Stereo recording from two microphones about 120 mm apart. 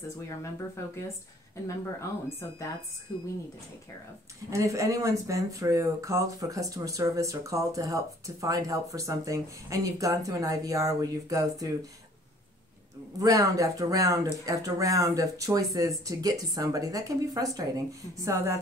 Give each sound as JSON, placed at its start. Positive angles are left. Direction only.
{"t": 0.3, "sound": "speech", "side_deg": 25}
{"t": 4.5, "sound": "speech", "side_deg": -25}
{"t": 13.2, "sound": "speech", "side_deg": -30}